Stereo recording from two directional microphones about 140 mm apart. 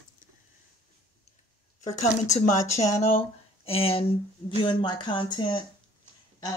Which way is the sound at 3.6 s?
45° left (ahead or behind).